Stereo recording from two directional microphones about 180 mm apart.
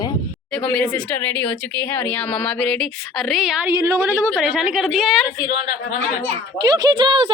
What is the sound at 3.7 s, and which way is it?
Speech, 15° right (ahead or behind).